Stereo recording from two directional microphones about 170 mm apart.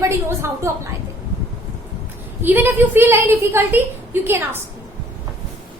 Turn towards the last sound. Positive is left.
turn(degrees=-10)  # may be behind; listen again after turning